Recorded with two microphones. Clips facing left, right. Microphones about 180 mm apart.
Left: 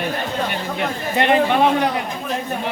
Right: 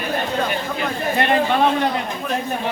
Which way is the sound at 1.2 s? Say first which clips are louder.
Left 2 dB; 20° left (ahead or behind).